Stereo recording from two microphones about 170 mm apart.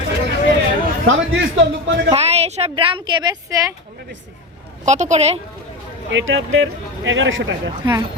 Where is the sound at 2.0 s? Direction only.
40° right (ahead or behind).